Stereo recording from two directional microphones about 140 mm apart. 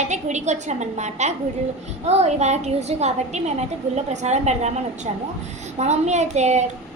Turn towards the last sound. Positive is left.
turn(degrees=-55)  # may be behind; listen again after turning